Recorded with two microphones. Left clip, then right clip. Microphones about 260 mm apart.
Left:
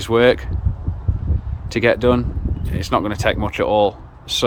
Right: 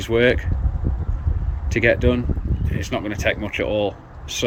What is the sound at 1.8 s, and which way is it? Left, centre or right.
Speech, centre.